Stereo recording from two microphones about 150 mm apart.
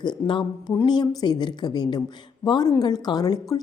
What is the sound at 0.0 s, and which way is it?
A woman's voice, 30° left (ahead or behind).